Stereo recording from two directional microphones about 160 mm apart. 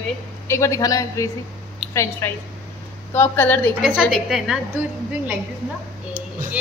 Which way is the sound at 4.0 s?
Centre (ahead or behind).